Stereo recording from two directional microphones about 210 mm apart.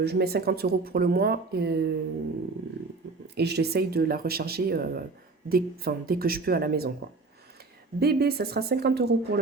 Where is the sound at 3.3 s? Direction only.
50° right (ahead or behind).